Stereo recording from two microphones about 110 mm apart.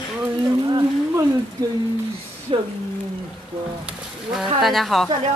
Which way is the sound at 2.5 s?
50° right (ahead or behind).